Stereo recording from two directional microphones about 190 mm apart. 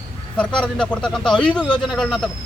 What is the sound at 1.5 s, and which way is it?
Speech, 25° left (ahead or behind).